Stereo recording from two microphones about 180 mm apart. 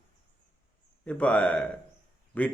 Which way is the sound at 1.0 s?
10° left (ahead or behind).